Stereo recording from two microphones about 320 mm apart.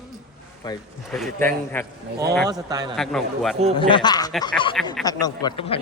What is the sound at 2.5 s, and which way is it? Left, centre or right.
Speech, centre.